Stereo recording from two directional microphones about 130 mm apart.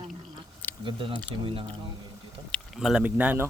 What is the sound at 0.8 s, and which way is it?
Speech, 45° right (ahead or behind).